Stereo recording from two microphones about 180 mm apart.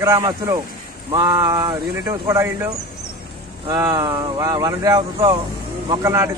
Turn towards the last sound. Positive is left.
turn(degrees=-15)  # may be behind; listen again after turning